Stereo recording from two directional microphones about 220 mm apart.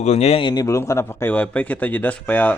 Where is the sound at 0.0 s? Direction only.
30° left (ahead or behind).